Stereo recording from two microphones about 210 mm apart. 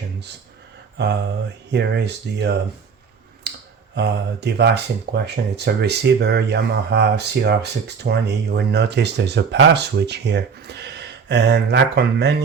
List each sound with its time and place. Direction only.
0.9 s a sound: 55° right (ahead or behind)
1.7 s speech: 55° right (ahead or behind)
3.5 s clicking: 50° right (ahead or behind)
3.9 s speech: 55° right (ahead or behind)